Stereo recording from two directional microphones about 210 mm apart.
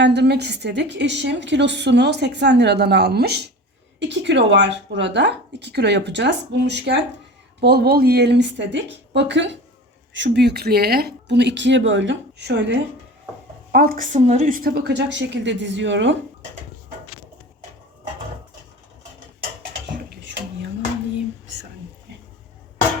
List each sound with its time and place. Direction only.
0.0 s a woman's voice: 55° right (ahead or behind)
13.7 s a woman's voice: 45° right (ahead or behind); by 16.1 s 60° right (ahead or behind)
19.9 s a sound: 55° right (ahead or behind)